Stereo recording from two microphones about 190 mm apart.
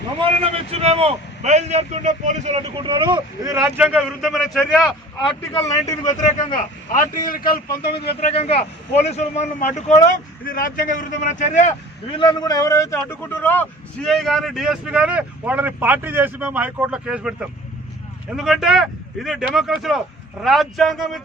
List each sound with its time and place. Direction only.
0.4 s a man's voice: 30° right (ahead or behind)
3.6 s speech: 5° right (ahead or behind)
5.8 s a man's voice: 20° left (ahead or behind)
6.2 s a man's voice: 45° left (ahead or behind)
7.9 s a man's voice: 30° left (ahead or behind)
12.1 s a man's voice: 25° left (ahead or behind); by 21.2 s centre (ahead or behind)